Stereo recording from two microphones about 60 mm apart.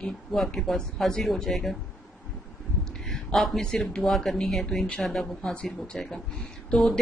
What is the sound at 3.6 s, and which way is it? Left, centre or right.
A woman's voice, centre.